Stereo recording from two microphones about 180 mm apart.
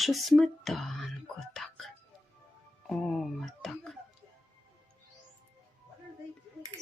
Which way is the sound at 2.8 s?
Centre (ahead or behind).